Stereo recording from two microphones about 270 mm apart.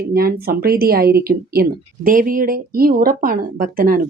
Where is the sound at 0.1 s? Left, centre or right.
Right.